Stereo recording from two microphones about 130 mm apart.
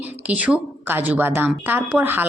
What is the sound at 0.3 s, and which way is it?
Speech, 10° right (ahead or behind).